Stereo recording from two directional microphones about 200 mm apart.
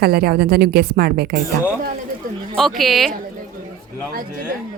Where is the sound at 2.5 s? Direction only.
Centre (ahead or behind).